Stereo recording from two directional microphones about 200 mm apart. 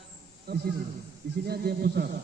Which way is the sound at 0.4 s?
55° right (ahead or behind).